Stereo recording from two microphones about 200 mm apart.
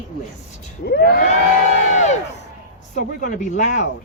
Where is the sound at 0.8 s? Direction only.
50° left (ahead or behind).